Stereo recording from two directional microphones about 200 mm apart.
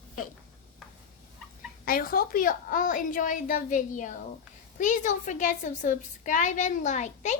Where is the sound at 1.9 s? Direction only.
45° left (ahead or behind).